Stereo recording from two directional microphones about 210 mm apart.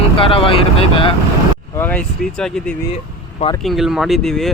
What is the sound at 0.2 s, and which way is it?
Speech, 25° left (ahead or behind).